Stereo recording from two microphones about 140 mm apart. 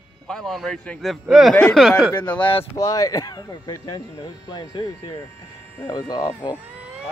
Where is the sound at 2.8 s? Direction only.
25° left (ahead or behind).